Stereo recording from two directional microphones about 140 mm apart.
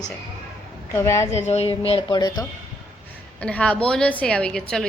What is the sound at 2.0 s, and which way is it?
Speech, 30° left (ahead or behind).